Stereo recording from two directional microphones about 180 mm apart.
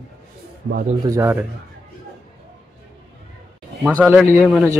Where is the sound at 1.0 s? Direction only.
15° right (ahead or behind).